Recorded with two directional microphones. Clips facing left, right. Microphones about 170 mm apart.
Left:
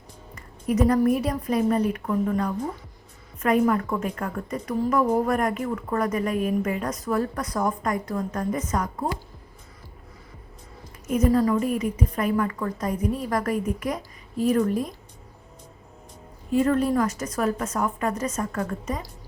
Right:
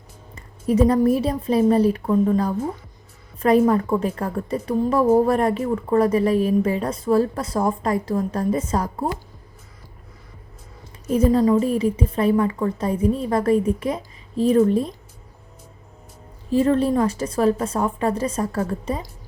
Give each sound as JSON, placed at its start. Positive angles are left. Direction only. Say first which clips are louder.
{"t": 0.3, "sound": "a woman's voice", "louder": "right 5 dB", "side_deg": -30}
{"t": 11.1, "sound": "a woman's voice", "louder": "right 4 dB", "side_deg": -30}
{"t": 16.5, "sound": "a woman's voice", "louder": "right 3 dB", "side_deg": -30}